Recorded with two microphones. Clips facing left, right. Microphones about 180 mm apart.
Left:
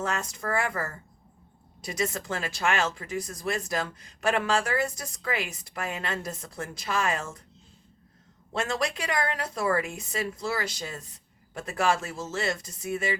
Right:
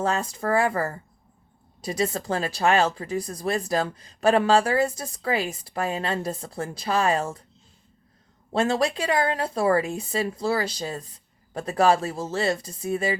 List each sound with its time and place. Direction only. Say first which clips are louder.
0.0 s speech: right 6 dB; 30° right (ahead or behind)
8.5 s speech: right 6 dB; 30° right (ahead or behind)